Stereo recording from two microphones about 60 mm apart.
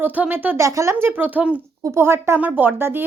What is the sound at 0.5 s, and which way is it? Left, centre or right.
Speech, right.